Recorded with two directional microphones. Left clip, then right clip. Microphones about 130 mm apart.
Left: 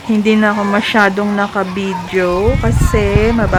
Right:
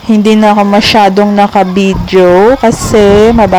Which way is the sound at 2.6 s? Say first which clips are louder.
Right 10 dB; 50° right (ahead or behind).